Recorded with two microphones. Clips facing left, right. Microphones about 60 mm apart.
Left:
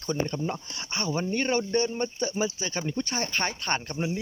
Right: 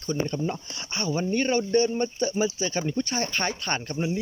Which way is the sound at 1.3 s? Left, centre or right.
Left.